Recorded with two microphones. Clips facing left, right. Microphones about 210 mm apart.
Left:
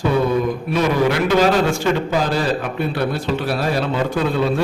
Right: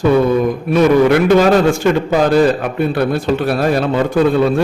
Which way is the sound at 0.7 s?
55° right (ahead or behind).